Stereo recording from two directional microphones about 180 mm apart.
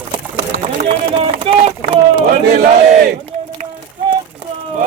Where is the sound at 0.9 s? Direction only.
30° right (ahead or behind).